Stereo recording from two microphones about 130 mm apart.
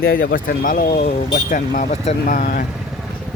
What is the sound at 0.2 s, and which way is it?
Speech, 90° left.